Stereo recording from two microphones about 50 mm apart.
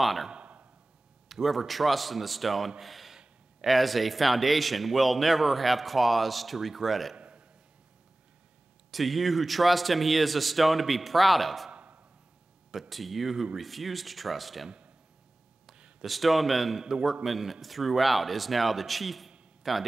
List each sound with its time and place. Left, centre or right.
0.0 s a man's voice: centre
0.3 s a sound: right
1.3 s speech: centre
7.2 s a sound: right
8.9 s speech: centre
12.9 s speech: centre
16.0 s speech: centre